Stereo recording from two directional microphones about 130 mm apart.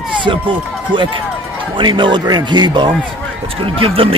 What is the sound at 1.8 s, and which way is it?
Speech, 40° right (ahead or behind).